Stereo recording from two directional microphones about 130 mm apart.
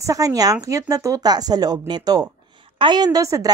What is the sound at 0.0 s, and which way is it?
A woman's voice, 25° right (ahead or behind).